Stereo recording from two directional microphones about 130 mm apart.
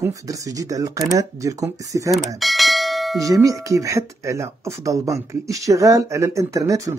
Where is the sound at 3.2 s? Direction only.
25° right (ahead or behind).